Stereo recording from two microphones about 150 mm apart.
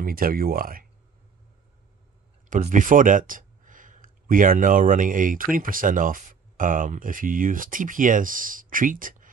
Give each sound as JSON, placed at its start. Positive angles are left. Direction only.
{"t": 0.0, "sound": "speech", "side_deg": -75}
{"t": 2.5, "sound": "speech", "side_deg": -60}